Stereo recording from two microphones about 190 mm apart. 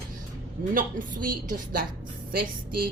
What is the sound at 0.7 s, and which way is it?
A woman's voice, 45° right (ahead or behind).